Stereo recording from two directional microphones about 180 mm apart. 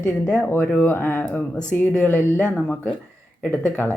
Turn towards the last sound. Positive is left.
turn(degrees=10)  # may be behind; listen again after turning